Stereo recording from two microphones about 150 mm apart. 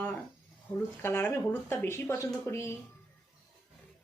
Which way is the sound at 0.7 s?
15° left (ahead or behind).